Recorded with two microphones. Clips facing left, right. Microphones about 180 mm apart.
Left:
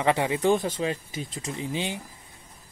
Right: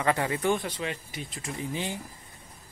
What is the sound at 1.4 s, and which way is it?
Speech, 20° left (ahead or behind).